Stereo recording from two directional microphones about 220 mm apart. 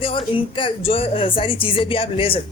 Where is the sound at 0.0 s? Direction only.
25° left (ahead or behind).